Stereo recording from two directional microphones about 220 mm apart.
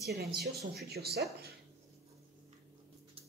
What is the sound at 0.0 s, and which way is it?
Speech, 45° right (ahead or behind).